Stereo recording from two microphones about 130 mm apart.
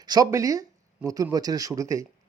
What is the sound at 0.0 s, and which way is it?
A man's voice, 30° right (ahead or behind).